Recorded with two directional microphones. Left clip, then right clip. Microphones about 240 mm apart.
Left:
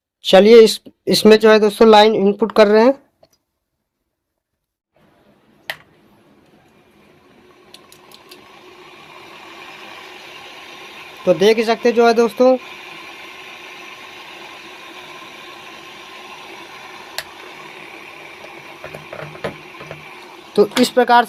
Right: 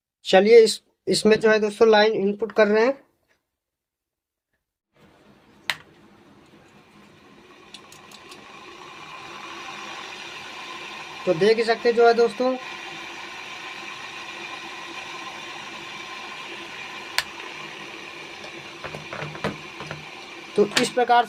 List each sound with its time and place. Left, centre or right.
0.2 s speech: left
5.7 s finger snapping: centre
11.3 s speech: left
20.6 s speech: left